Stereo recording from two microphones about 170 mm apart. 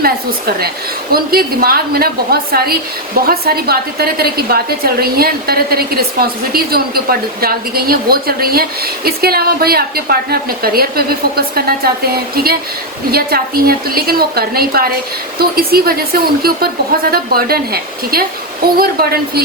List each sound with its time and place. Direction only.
0.0 s a woman's voice: 60° right (ahead or behind)